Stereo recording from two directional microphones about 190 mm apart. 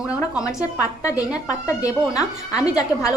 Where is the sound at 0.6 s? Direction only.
15° left (ahead or behind).